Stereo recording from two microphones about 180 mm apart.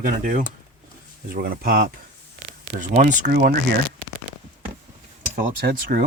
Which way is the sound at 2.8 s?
45° right (ahead or behind).